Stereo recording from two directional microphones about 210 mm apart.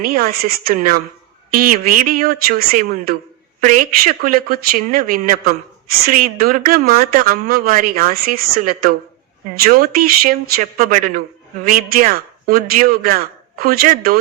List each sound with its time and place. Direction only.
0.0 s speech: 45° right (ahead or behind)
9.6 s speech: 45° right (ahead or behind)